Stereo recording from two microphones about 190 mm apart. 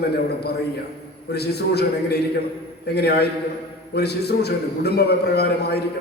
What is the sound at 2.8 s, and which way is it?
A man's voice, 60° left (ahead or behind).